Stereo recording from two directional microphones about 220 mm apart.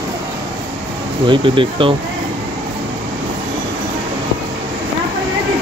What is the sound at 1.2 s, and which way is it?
Speech, 20° right (ahead or behind).